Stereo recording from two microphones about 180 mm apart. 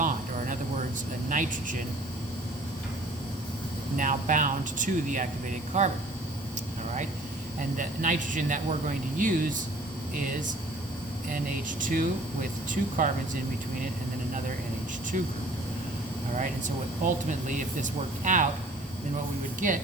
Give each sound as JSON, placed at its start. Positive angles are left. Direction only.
{"t": 0.0, "sound": "a sound", "side_deg": -50}
{"t": 1.3, "sound": "speech", "side_deg": -45}
{"t": 3.9, "sound": "speech", "side_deg": -45}
{"t": 7.8, "sound": "speech", "side_deg": -45}
{"t": 11.8, "sound": "speech", "side_deg": -50}
{"t": 16.3, "sound": "speech", "side_deg": -45}
{"t": 19.5, "sound": "speech", "side_deg": -45}